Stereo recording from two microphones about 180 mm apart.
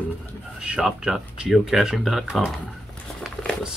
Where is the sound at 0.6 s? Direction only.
5° right (ahead or behind).